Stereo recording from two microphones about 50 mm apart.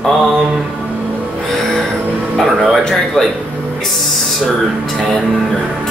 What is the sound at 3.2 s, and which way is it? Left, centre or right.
Speech, centre.